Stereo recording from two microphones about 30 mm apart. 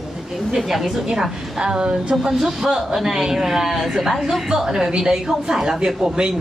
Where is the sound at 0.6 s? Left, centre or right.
Centre.